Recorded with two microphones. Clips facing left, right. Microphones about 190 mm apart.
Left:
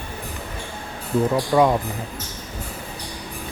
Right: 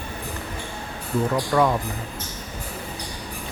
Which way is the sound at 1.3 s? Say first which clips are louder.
Left 3 dB; 15° left (ahead or behind).